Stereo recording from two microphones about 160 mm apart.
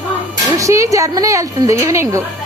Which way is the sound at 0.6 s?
20° right (ahead or behind).